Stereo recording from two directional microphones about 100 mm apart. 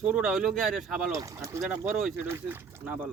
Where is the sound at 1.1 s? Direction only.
35° right (ahead or behind).